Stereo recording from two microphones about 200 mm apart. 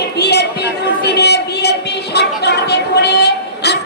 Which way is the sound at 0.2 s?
55° left (ahead or behind).